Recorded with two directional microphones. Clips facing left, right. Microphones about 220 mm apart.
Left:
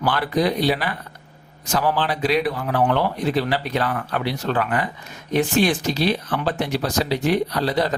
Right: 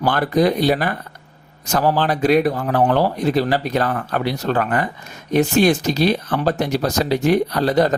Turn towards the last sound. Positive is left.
turn(degrees=-45)  # may be behind; listen again after turning